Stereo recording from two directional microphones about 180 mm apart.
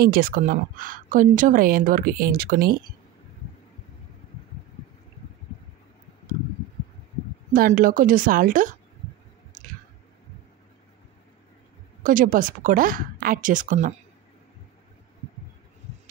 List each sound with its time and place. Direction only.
0.0 s a woman's voice: 50° right (ahead or behind)
7.5 s a woman's voice: 50° right (ahead or behind)
12.0 s a woman's voice: 45° right (ahead or behind)